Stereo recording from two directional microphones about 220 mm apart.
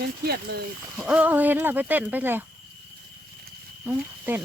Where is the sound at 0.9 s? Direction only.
5° right (ahead or behind).